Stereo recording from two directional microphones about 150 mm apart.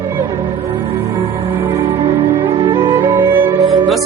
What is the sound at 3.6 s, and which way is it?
Music, centre (ahead or behind).